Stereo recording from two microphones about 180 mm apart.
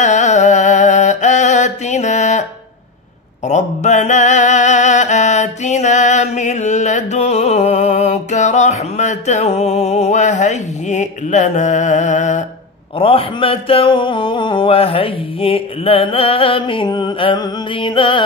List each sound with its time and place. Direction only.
0.0 s music: 40° left (ahead or behind)
3.4 s music: 40° left (ahead or behind)
12.9 s a sound: 30° left (ahead or behind)